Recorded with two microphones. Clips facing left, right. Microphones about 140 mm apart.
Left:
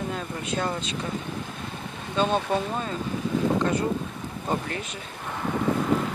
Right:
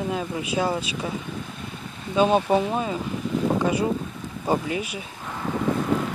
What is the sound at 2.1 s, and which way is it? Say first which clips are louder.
Speech: right 5 dB; 10° right (ahead or behind).